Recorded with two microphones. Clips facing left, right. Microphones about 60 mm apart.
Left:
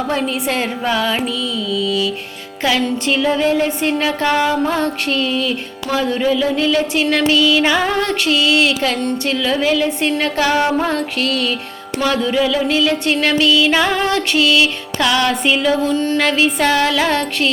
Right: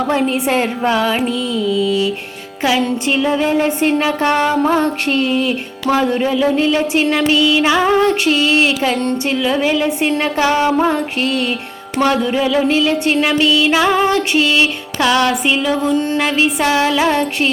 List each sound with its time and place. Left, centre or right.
0.1 s music: right
2.6 s music: centre
4.3 s music: right; by 14.1 s centre
14.1 s music: right; by 15.9 s centre
15.9 s music: right